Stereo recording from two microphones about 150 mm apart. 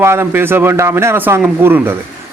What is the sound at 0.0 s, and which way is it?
Speech, 15° right (ahead or behind).